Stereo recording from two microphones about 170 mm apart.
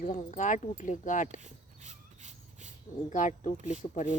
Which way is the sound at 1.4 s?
45° right (ahead or behind).